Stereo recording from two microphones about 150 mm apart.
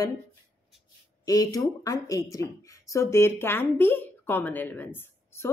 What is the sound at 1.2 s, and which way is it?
Speech, 25° left (ahead or behind).